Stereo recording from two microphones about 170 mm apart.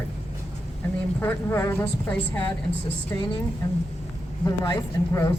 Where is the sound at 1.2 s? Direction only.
15° left (ahead or behind).